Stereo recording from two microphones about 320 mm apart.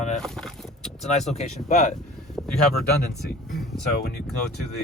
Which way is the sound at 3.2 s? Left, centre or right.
Centre.